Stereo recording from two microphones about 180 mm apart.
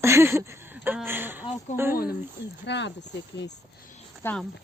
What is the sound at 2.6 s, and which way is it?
Speech, 75° left (ahead or behind).